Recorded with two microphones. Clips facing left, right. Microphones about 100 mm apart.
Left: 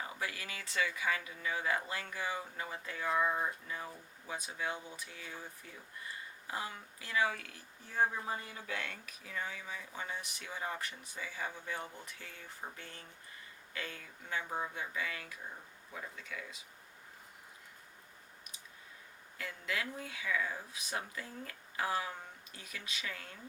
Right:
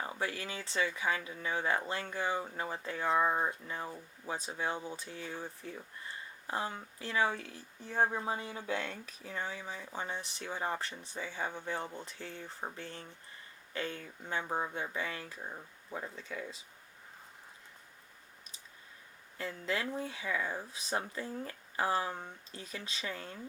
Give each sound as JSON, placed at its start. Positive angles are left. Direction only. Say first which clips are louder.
{"t": 0.0, "sound": "speech", "louder": "right 4 dB", "side_deg": -30}
{"t": 19.4, "sound": "speech", "louder": "right 4 dB", "side_deg": -30}